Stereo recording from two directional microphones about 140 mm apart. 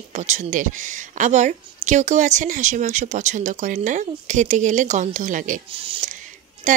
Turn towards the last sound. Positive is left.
turn(degrees=-60)  # may be behind; listen again after turning